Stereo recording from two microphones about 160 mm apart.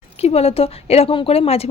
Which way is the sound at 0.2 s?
40° left (ahead or behind).